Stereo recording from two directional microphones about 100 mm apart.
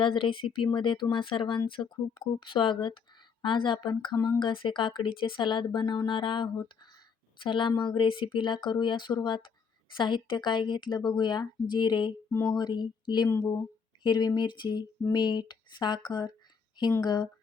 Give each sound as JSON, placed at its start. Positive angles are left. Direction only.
{"t": 0.0, "sound": "speech", "side_deg": 60}
{"t": 12.3, "sound": "speech", "side_deg": 35}